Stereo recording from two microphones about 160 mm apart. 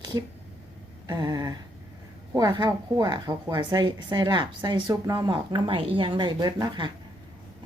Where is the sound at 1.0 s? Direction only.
25° right (ahead or behind).